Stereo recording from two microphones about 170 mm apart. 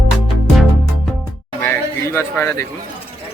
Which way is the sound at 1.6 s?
10° left (ahead or behind).